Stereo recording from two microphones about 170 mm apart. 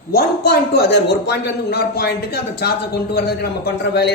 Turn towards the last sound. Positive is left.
turn(degrees=75)  # may be behind; listen again after turning